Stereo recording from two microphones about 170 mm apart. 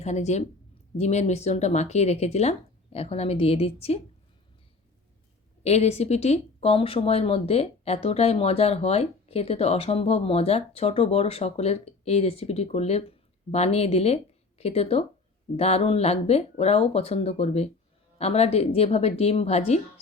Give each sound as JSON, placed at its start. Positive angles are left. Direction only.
{"t": 0.0, "sound": "speech", "side_deg": 40}
{"t": 5.6, "sound": "speech", "side_deg": 40}